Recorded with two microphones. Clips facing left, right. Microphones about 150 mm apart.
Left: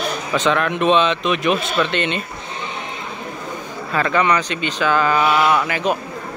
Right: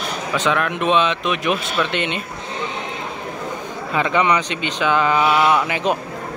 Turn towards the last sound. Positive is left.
turn(degrees=-20)  # may be behind; listen again after turning